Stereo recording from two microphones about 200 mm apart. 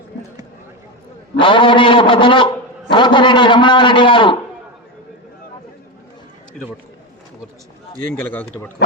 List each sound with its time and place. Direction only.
1.4 s a man's voice: 25° left (ahead or behind)
7.9 s speech: 10° left (ahead or behind)